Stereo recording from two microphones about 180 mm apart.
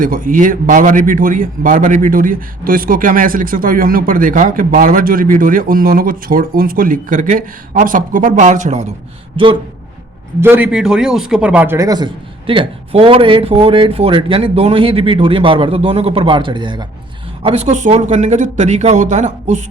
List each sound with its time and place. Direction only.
0.0 s a man's voice: 50° right (ahead or behind)
10.4 s a man's voice: 10° right (ahead or behind); by 19.6 s 40° right (ahead or behind)